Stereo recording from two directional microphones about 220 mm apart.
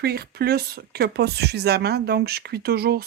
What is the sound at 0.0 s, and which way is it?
Speech, 45° right (ahead or behind).